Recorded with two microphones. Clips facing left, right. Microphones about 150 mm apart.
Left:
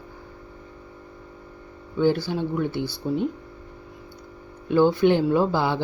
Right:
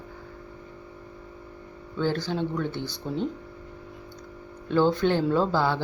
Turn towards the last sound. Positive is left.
turn(degrees=15)  # may be behind; listen again after turning